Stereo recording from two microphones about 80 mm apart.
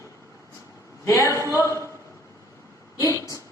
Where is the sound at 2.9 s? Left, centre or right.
Left.